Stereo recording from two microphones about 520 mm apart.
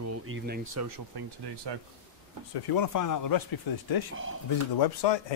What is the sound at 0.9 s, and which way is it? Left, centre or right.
Speech, right.